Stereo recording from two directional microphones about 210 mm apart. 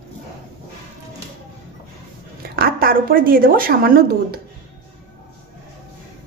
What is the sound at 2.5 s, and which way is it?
Speech, 45° right (ahead or behind).